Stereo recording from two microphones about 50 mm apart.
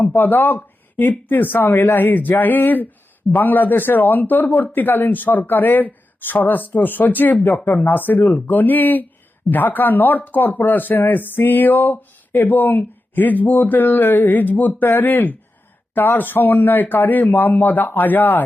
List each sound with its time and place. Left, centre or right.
0.2 s speech: left